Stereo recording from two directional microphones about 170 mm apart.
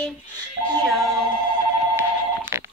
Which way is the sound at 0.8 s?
Centre (ahead or behind).